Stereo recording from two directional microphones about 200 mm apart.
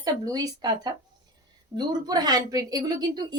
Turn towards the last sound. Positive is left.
turn(degrees=-20)  # may be behind; listen again after turning